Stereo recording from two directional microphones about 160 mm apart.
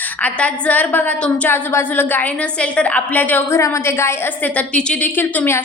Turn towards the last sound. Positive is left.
turn(degrees=15)  # may be behind; listen again after turning